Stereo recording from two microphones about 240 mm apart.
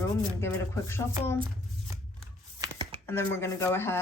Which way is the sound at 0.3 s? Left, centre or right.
Centre.